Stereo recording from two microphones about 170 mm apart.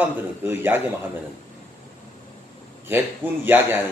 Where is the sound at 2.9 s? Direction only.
15° right (ahead or behind).